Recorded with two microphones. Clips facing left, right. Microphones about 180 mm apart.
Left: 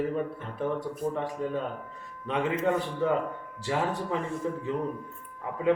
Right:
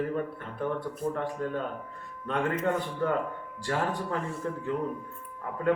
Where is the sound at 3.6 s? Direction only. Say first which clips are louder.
Left 1 dB; 5° left (ahead or behind).